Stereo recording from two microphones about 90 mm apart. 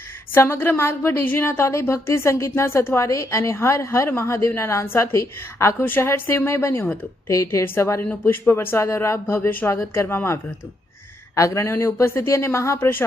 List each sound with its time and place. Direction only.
0.3 s a woman's voice: 25° left (ahead or behind)